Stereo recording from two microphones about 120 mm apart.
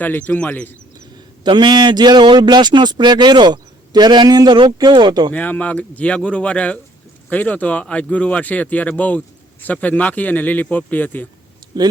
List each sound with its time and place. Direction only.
0.0 s speech: 15° left (ahead or behind)
1.5 s a man's voice: 40° right (ahead or behind)
5.3 s speech: 15° left (ahead or behind)
11.6 s a sound: 35° right (ahead or behind)